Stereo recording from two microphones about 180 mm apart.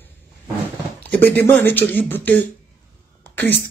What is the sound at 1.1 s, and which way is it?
Speech, 10° left (ahead or behind).